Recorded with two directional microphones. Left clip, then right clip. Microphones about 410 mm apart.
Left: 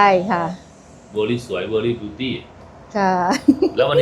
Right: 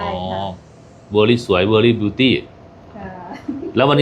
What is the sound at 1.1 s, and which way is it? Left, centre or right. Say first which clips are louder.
Speech: right 7 dB; right.